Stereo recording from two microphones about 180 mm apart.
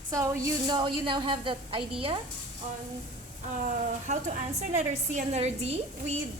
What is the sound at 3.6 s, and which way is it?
A woman's voice, 40° right (ahead or behind).